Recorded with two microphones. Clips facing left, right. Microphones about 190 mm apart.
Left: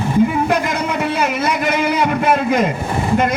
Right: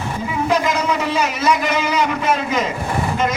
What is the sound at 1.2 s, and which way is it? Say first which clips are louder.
A man's voice: even; 55° left (ahead or behind).